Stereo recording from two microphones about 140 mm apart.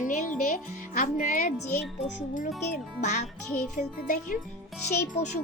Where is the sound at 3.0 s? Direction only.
60° left (ahead or behind).